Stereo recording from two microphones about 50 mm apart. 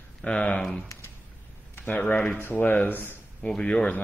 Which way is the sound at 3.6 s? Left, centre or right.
Centre.